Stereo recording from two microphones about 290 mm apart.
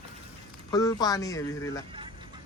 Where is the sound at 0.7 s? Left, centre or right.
Centre.